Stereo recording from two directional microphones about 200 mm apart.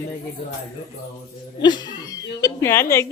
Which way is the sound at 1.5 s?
20° left (ahead or behind).